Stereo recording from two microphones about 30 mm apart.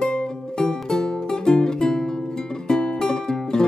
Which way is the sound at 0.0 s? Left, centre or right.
Left.